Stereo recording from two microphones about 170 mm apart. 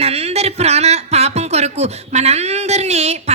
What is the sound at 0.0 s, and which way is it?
Speech, 35° right (ahead or behind).